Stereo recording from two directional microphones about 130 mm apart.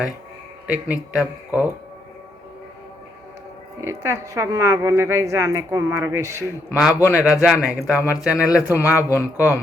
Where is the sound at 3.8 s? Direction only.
20° right (ahead or behind).